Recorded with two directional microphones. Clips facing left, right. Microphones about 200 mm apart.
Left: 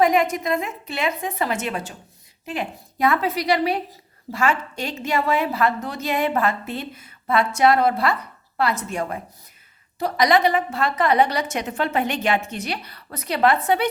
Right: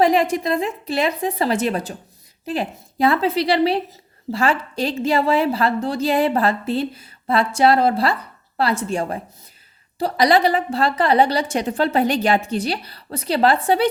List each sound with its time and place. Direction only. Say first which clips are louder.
0.0 s a woman's voice: right 2 dB; 30° right (ahead or behind)